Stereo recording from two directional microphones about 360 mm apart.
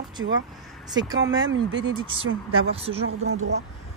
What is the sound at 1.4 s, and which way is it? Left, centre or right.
Speech, right.